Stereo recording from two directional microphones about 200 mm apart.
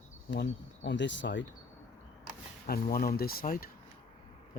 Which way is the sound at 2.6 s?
45° left (ahead or behind).